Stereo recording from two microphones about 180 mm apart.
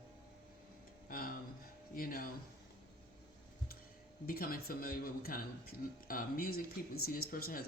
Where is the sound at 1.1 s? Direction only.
50° left (ahead or behind).